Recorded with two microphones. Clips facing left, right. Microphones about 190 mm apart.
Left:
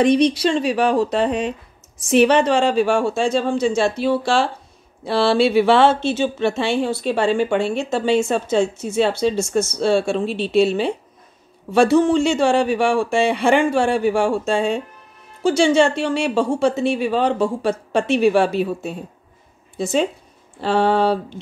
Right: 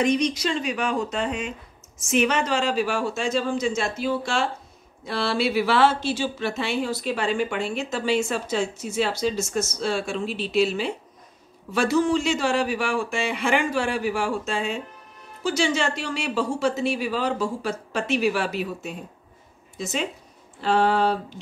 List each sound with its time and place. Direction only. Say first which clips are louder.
0.0 s speech: left 7 dB; 30° left (ahead or behind)